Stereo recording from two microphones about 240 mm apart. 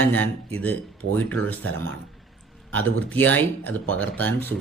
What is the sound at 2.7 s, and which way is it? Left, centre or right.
Speech, centre.